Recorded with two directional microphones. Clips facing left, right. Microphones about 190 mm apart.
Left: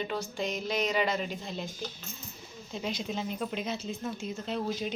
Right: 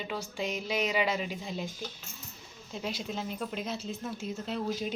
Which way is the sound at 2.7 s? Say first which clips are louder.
Left 2 dB; 5° right (ahead or behind).